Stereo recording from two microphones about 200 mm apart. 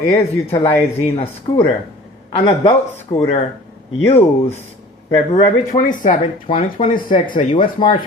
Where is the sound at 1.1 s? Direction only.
25° left (ahead or behind).